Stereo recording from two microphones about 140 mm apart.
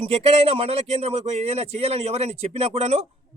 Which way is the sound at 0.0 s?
45° right (ahead or behind).